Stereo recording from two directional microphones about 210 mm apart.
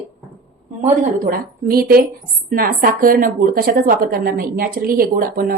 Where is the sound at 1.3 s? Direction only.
45° right (ahead or behind).